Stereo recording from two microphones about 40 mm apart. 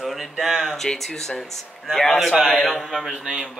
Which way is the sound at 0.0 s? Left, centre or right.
Centre.